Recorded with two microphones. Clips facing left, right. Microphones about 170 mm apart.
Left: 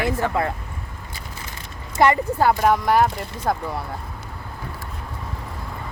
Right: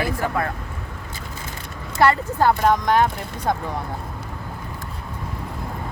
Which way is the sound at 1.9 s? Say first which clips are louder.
Left 1 dB; 15° left (ahead or behind).